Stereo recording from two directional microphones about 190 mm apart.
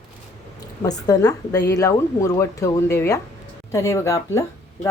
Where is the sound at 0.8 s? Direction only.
20° left (ahead or behind).